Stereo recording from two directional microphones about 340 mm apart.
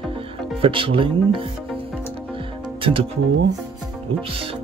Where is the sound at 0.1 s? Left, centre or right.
Centre.